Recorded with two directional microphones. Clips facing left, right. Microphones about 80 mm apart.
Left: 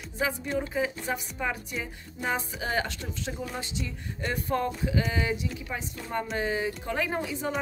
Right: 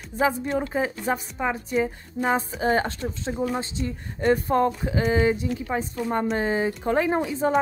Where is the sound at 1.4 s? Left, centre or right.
Right.